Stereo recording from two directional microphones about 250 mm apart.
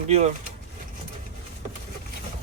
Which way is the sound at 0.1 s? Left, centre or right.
Right.